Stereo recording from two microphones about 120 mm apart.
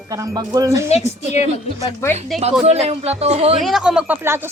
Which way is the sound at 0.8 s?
65° left (ahead or behind).